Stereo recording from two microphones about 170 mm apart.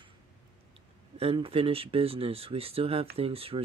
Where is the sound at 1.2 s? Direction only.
35° right (ahead or behind).